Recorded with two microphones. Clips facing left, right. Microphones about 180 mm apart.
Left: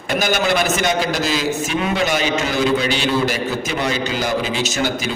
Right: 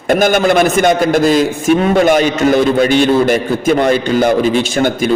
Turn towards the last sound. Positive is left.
turn(degrees=-50)  # may be behind; listen again after turning